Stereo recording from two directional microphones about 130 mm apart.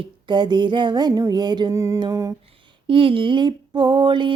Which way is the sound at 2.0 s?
25° right (ahead or behind).